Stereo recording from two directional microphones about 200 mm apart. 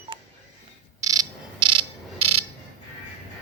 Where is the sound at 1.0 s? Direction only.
20° right (ahead or behind).